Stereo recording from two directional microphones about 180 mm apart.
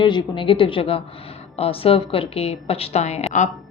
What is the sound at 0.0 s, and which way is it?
A woman's voice, 25° left (ahead or behind).